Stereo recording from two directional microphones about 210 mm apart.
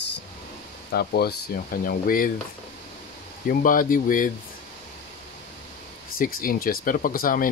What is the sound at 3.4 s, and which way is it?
Speech, 40° left (ahead or behind).